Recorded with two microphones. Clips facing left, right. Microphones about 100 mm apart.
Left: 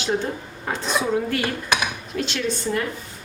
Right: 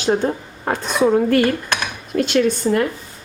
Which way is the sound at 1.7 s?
5° left (ahead or behind).